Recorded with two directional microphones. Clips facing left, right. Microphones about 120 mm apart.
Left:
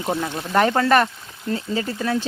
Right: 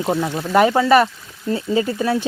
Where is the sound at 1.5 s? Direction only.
25° right (ahead or behind).